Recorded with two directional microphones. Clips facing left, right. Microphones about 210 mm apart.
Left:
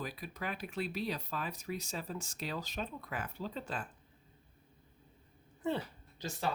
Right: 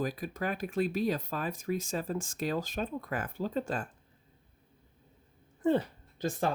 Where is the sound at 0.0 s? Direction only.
45° right (ahead or behind).